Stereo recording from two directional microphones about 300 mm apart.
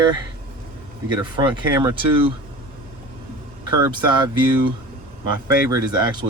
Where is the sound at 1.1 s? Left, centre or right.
Centre.